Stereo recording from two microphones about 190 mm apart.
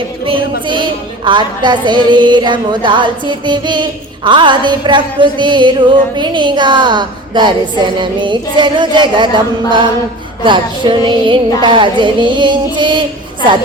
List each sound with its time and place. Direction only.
0.3 s a woman's voice: 25° right (ahead or behind)